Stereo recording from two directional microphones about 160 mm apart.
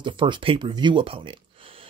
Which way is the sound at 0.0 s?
30° right (ahead or behind).